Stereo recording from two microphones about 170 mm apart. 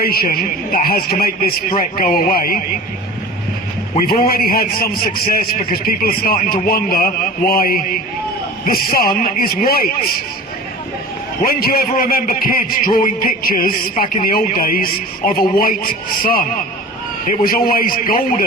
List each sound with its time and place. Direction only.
0.0 s a man's voice: 65° left (ahead or behind)
4.2 s a man's voice: 60° left (ahead or behind)
11.4 s a man's voice: 60° left (ahead or behind)